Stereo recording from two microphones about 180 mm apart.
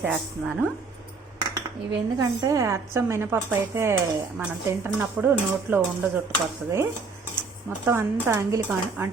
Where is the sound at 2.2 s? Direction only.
15° right (ahead or behind).